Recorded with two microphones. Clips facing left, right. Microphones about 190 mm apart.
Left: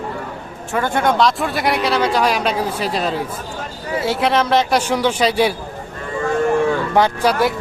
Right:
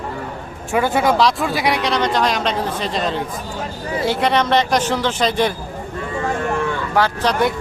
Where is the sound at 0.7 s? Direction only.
5° right (ahead or behind); by 5.5 s 10° left (ahead or behind).